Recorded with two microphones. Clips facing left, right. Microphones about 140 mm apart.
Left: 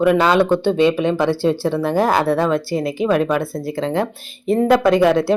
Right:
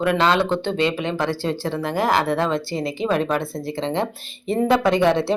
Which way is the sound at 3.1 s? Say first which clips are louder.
Left 4 dB; 5° left (ahead or behind).